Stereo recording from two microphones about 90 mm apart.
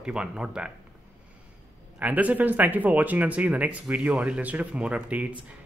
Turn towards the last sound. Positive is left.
turn(degrees=-15)  # may be behind; listen again after turning